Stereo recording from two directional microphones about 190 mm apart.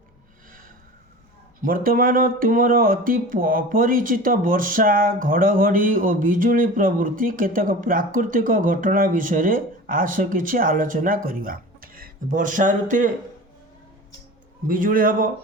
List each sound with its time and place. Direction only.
1.6 s speech: 50° right (ahead or behind)
14.7 s speech: 45° right (ahead or behind)